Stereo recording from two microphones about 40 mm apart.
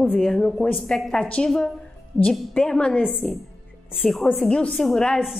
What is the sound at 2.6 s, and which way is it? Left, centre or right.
Speech, centre.